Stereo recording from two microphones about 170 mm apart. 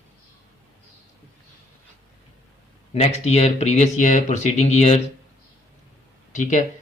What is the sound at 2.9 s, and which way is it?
Speech, 40° left (ahead or behind).